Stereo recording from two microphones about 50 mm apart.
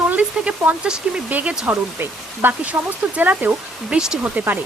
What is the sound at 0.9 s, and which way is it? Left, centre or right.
Speech, centre.